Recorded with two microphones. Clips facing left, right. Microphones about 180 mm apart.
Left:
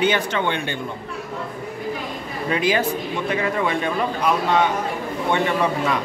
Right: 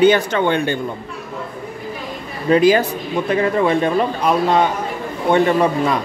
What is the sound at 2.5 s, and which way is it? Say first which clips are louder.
Speech: right 8 dB; 40° right (ahead or behind).